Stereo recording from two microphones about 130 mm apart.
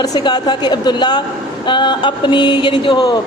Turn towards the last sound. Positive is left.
turn(degrees=35)  # may be behind; listen again after turning